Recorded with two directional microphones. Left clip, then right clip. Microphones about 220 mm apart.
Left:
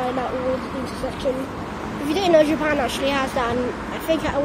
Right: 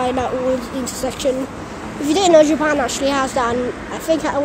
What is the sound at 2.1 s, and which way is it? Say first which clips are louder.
A woman's voice: right 5 dB; 30° right (ahead or behind).